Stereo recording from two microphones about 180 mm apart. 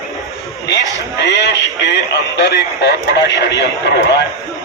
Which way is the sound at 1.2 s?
75° left (ahead or behind).